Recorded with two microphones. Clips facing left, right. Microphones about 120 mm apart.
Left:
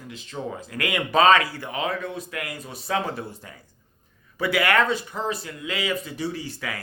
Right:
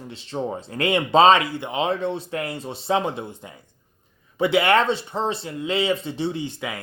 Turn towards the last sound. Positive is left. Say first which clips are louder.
# right 3 dB
turn(degrees=-20)  # may be behind; listen again after turning